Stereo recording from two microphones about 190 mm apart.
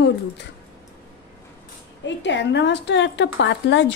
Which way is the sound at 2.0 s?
70° left (ahead or behind).